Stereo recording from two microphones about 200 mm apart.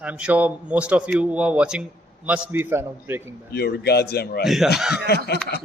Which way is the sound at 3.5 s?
55° left (ahead or behind).